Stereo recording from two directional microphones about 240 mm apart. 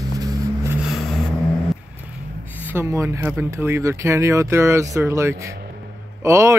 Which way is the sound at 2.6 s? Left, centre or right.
Centre.